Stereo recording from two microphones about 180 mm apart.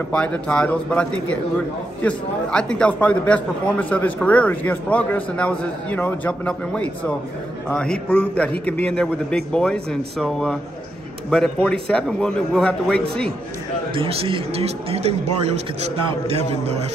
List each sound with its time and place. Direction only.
0.1 s a man's voice: 5° left (ahead or behind)
13.9 s a man's voice: 30° right (ahead or behind)